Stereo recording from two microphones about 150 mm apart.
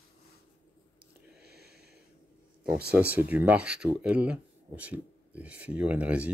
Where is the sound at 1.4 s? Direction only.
90° right.